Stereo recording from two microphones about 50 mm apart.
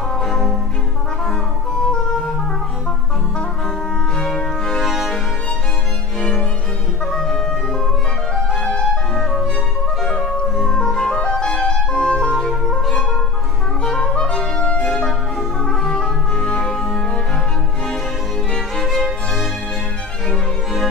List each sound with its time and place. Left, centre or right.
0.2 s music: centre
4.2 s music: centre
4.8 s music: centre
8.5 s music: centre
10.5 s music: centre
10.8 s music: centre
18.5 s music: centre